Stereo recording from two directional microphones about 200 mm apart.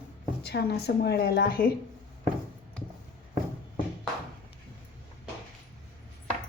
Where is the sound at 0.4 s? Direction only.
55° left (ahead or behind).